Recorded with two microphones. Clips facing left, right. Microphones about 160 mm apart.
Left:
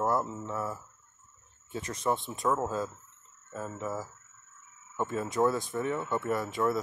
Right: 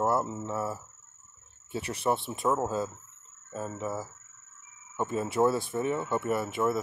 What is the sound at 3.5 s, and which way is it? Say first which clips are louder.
Speech: right 2 dB; 20° right (ahead or behind).